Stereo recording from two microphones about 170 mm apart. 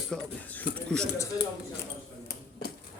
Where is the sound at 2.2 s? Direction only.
65° left (ahead or behind).